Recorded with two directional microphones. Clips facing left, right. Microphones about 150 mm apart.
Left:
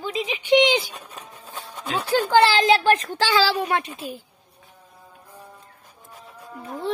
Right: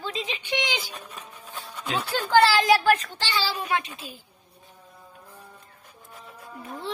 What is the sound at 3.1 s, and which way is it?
A child's voice, 80° left.